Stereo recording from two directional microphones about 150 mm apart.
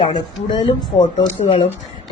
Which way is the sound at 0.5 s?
35° left (ahead or behind).